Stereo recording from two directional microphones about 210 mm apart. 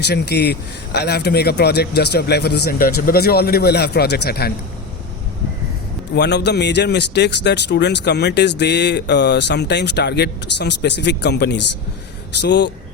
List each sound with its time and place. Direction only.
0.0 s speech: 50° left (ahead or behind)
6.1 s speech: 55° left (ahead or behind)